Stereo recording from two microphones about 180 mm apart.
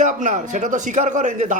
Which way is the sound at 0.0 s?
45° right (ahead or behind).